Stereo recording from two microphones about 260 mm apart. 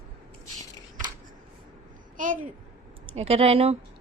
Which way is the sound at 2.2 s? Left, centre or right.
Right.